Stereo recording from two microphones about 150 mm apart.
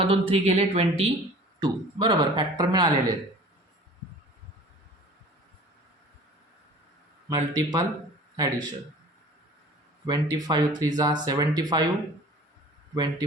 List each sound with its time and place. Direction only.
0.0 s speech: 40° right (ahead or behind)
7.3 s speech: 25° right (ahead or behind)
10.1 s speech: 25° right (ahead or behind)
12.9 s speech: 25° right (ahead or behind)